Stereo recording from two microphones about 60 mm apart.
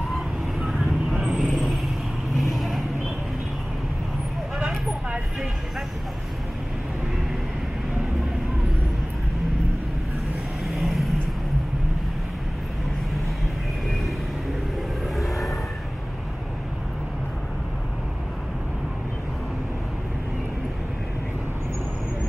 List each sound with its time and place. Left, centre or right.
0.1 s vehicle: centre
10.7 s vehicle: centre